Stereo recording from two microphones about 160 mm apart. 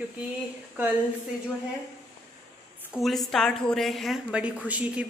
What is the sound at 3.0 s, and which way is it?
A woman's voice, centre (ahead or behind).